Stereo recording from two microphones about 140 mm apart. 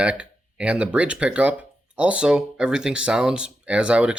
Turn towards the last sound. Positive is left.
turn(degrees=-10)  # may be behind; listen again after turning